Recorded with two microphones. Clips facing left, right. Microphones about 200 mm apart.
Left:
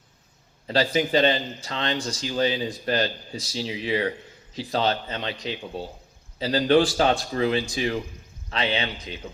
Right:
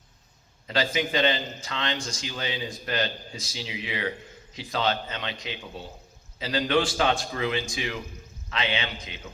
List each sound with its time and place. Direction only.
0.7 s a man's voice: 35° left (ahead or behind)